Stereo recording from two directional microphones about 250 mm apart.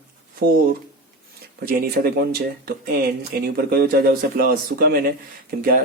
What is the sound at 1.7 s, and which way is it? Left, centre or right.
Speech, right.